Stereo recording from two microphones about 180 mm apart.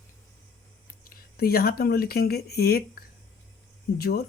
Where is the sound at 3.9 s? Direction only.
60° left (ahead or behind).